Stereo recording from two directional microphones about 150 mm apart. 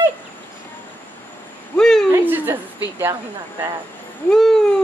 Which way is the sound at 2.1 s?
15° right (ahead or behind).